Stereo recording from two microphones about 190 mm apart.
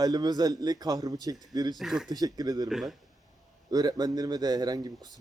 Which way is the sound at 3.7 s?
20° right (ahead or behind).